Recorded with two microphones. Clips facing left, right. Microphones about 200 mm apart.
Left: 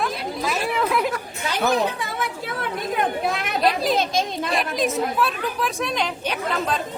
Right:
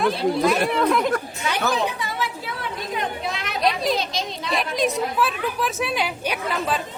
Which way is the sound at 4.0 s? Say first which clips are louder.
Left 5 dB; 50° left (ahead or behind).